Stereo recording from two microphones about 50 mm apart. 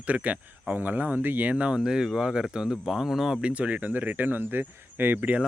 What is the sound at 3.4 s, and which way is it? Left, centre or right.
Speech, right.